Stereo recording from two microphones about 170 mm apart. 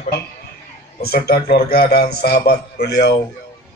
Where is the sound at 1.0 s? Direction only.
65° left (ahead or behind).